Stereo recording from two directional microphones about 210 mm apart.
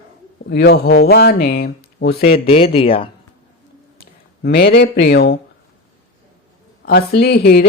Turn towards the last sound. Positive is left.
turn(degrees=50)  # may be behind; listen again after turning